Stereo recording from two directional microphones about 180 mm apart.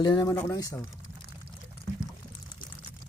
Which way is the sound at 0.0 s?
25° left (ahead or behind).